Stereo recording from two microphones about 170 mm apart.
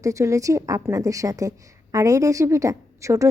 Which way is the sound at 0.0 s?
20° right (ahead or behind).